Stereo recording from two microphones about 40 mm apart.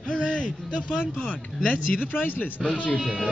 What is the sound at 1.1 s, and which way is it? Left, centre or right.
Speech, left.